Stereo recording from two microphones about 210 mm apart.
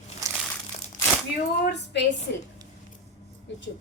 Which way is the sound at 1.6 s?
55° left (ahead or behind).